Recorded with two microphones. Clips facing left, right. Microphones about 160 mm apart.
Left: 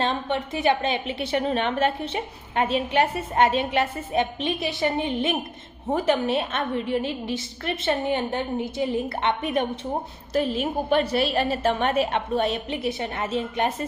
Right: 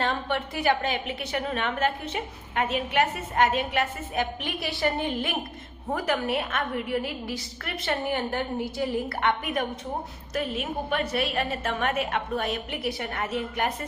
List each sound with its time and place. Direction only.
0.0 s a woman's voice: 20° left (ahead or behind)